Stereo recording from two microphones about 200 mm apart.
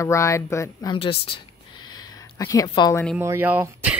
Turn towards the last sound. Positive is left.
turn(degrees=-10)  # may be behind; listen again after turning